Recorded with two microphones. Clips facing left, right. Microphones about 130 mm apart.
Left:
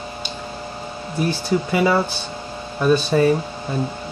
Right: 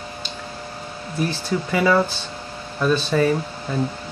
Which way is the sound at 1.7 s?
15° left (ahead or behind).